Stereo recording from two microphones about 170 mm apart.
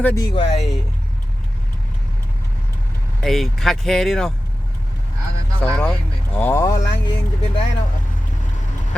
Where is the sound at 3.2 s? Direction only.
Centre (ahead or behind).